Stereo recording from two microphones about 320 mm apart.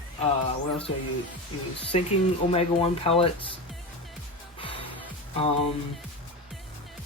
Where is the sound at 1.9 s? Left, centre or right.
Centre.